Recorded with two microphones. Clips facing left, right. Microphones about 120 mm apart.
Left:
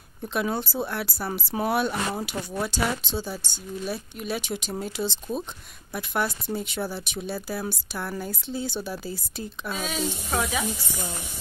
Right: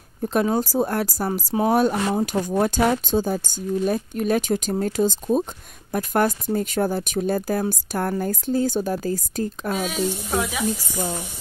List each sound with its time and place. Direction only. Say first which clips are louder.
0.2 s speech: right 7 dB; 40° right (ahead or behind)
9.8 s snake: right 4 dB; 5° right (ahead or behind)
11.0 s speech: right 7 dB; 25° right (ahead or behind)